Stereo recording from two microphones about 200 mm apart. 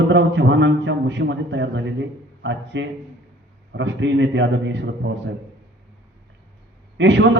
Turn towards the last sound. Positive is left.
turn(degrees=-65)  # may be behind; listen again after turning